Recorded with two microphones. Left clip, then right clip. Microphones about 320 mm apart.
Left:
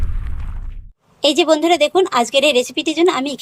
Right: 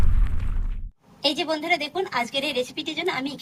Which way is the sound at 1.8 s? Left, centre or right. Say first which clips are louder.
Left 12 dB; centre.